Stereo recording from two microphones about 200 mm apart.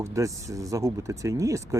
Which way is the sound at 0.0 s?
15° right (ahead or behind).